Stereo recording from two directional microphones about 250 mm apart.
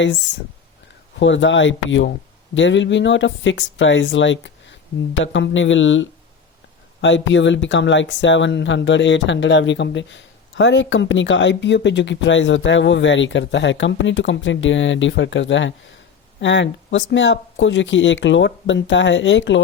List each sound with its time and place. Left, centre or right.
1.2 s speech: left